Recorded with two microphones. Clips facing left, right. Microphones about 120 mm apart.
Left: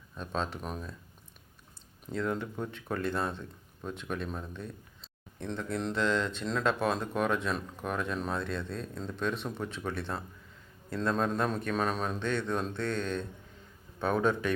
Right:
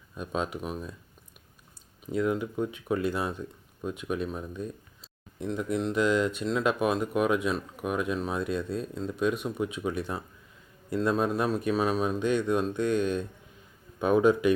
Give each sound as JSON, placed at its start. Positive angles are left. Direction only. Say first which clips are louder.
{"t": 0.1, "sound": "speech", "louder": "right 3 dB", "side_deg": -10}
{"t": 2.1, "sound": "speech", "louder": "right 5 dB", "side_deg": -10}